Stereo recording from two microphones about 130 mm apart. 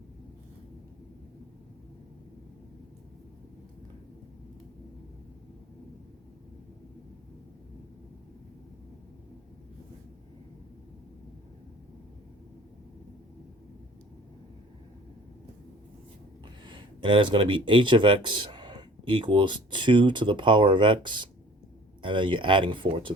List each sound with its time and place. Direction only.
16.6 s speech: 40° right (ahead or behind)